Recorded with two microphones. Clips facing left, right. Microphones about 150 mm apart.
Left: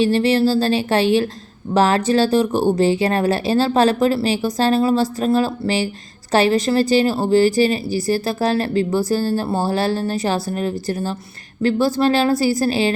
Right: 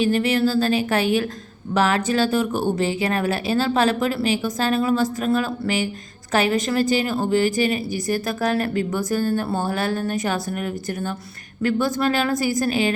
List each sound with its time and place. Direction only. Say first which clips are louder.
0.0 s speech: left 4 dB; 35° left (ahead or behind)